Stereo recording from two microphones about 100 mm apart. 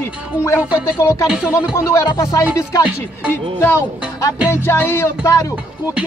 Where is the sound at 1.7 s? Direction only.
30° left (ahead or behind).